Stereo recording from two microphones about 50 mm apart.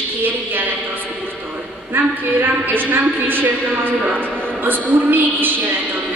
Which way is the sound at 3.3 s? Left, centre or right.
Right.